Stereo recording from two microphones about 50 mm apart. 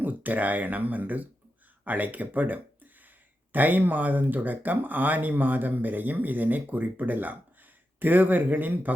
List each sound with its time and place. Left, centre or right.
0.0 s speech: right